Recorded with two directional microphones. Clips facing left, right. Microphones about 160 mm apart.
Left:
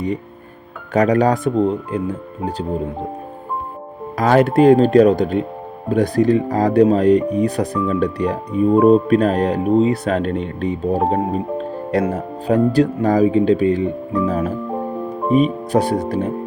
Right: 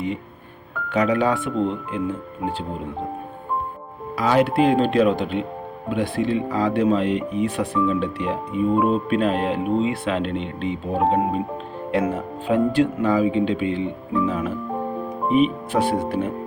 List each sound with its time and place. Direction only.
0.9 s speech: 45° left (ahead or behind)
4.2 s speech: 45° left (ahead or behind)